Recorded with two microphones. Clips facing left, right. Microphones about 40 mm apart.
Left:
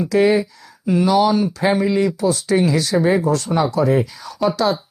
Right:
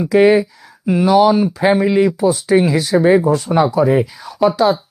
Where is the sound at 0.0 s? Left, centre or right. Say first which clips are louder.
Right 4 dB; centre.